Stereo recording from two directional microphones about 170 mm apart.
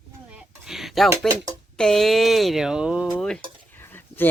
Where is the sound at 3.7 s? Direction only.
10° left (ahead or behind).